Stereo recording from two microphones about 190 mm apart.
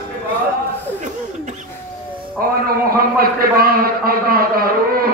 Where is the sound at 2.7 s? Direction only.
50° right (ahead or behind).